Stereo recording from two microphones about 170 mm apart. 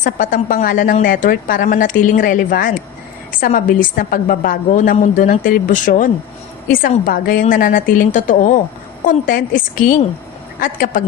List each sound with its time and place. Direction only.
0.0 s a woman's voice: 50° left (ahead or behind)